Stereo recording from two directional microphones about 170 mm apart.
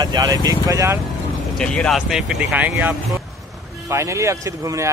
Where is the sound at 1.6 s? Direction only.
5° left (ahead or behind); by 4.8 s 20° right (ahead or behind).